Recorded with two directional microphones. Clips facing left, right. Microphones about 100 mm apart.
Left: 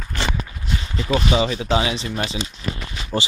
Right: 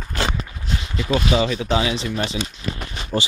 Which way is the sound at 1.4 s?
20° left (ahead or behind).